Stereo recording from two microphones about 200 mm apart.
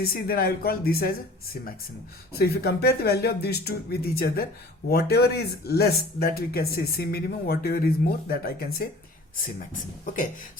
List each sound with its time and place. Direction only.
0.0 s speech: 50° left (ahead or behind)
2.4 s speech: 55° left (ahead or behind)